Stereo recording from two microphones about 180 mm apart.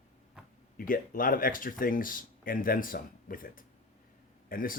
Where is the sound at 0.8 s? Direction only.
50° left (ahead or behind).